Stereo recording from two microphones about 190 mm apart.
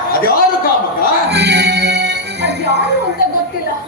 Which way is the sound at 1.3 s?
65° right (ahead or behind).